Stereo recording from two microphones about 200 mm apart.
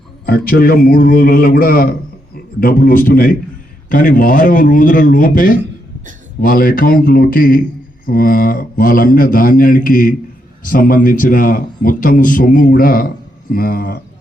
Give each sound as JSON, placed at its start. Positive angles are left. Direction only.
{"t": 0.3, "sound": "a man's voice", "side_deg": 50}